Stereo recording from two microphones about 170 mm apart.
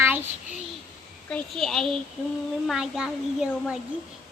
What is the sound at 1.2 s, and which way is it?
A woman's voice, 5° left (ahead or behind).